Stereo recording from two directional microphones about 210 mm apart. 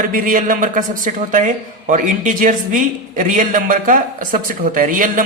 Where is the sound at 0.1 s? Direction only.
40° right (ahead or behind).